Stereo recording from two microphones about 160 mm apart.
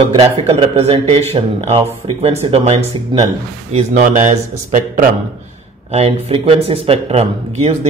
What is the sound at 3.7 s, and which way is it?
Speech, 50° right (ahead or behind).